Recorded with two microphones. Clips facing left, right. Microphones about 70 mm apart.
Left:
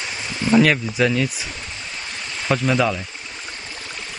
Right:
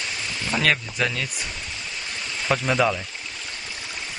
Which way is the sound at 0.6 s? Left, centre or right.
Centre.